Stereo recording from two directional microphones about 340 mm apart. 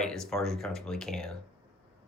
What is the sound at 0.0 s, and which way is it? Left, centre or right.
Speech, centre.